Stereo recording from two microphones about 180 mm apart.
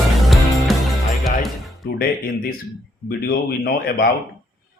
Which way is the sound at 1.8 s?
55° left (ahead or behind).